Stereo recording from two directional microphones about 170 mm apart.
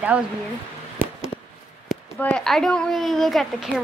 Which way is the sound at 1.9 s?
5° left (ahead or behind).